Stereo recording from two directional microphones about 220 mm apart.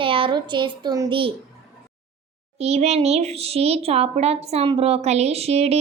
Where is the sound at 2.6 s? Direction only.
30° right (ahead or behind).